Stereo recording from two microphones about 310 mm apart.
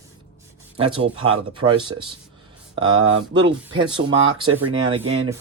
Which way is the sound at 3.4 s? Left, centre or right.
Centre.